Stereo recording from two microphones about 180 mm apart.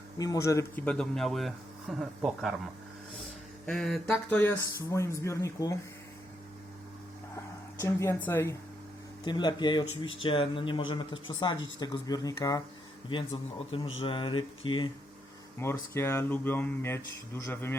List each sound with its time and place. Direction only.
0.2 s speech: 20° left (ahead or behind); by 2.6 s centre (ahead or behind)
3.7 s speech: 5° left (ahead or behind)
7.8 s speech: 15° left (ahead or behind)
9.2 s speech: 25° left (ahead or behind)
15.5 s speech: 15° left (ahead or behind)